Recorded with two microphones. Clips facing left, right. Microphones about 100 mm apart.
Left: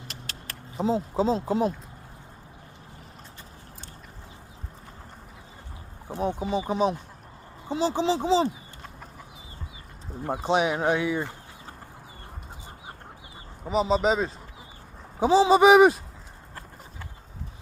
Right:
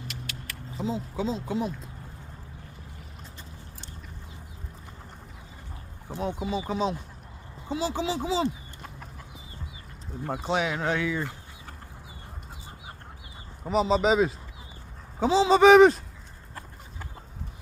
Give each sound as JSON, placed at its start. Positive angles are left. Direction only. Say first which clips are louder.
{"t": 0.1, "sound": "a sound", "louder": "right 1 dB", "side_deg": 35}
{"t": 6.5, "sound": "speech", "louder": "left 4 dB", "side_deg": 20}
{"t": 10.3, "sound": "speech", "louder": "left 4 dB", "side_deg": 20}
{"t": 13.7, "sound": "speech", "louder": "even", "side_deg": 0}
{"t": 15.2, "sound": "speech", "louder": "left 1 dB", "side_deg": 15}